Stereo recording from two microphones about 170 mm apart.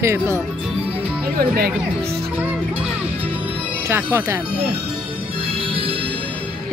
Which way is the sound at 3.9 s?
15° right (ahead or behind).